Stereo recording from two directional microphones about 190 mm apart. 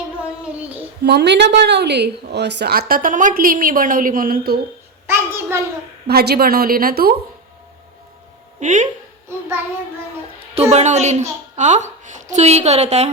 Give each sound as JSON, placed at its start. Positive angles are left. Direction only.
{"t": 1.0, "sound": "a woman's voice", "side_deg": -60}
{"t": 5.0, "sound": "a child's voice", "side_deg": -15}
{"t": 6.1, "sound": "a woman's voice", "side_deg": -55}
{"t": 8.6, "sound": "a woman's voice", "side_deg": -40}
{"t": 10.7, "sound": "a woman's voice", "side_deg": -35}